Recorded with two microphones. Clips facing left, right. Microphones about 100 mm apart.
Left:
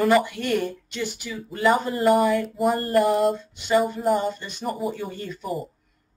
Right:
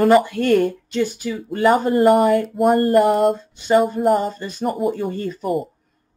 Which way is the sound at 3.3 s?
40° right (ahead or behind).